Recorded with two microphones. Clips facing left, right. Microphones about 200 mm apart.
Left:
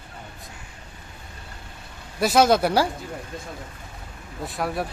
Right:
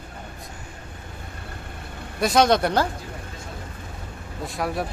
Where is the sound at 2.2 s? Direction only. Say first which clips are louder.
Left 1 dB; 5° left (ahead or behind).